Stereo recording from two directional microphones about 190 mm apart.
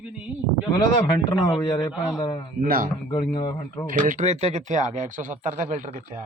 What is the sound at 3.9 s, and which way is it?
Speech, 40° right (ahead or behind).